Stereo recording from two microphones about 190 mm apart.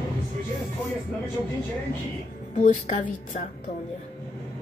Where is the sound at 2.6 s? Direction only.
40° left (ahead or behind).